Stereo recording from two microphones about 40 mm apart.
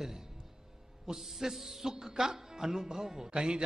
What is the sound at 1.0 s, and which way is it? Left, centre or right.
A man's voice, centre.